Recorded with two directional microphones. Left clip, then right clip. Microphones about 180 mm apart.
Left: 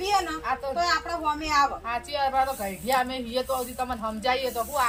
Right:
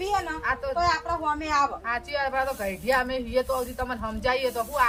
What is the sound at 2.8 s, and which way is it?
Speech, 5° right (ahead or behind).